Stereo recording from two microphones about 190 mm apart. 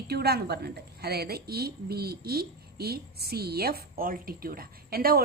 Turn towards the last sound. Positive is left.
turn(degrees=-50)  # may be behind; listen again after turning